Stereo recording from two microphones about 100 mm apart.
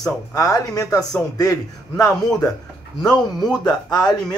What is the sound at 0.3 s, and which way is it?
A man's voice, 35° left (ahead or behind).